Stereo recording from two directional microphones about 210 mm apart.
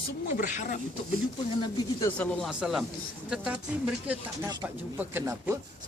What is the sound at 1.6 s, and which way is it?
Speech, 15° left (ahead or behind).